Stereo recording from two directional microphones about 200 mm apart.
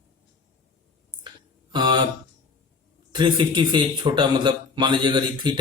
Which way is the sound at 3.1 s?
25° right (ahead or behind).